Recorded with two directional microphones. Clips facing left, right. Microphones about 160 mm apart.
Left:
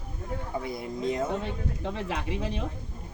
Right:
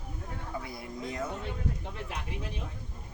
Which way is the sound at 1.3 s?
90° left.